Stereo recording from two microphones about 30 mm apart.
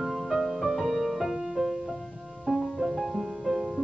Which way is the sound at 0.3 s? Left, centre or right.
Centre.